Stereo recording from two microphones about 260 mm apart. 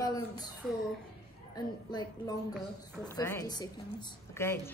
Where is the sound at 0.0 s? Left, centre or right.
Centre.